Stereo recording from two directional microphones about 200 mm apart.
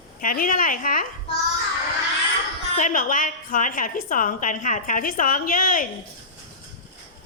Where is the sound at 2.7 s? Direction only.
40° left (ahead or behind).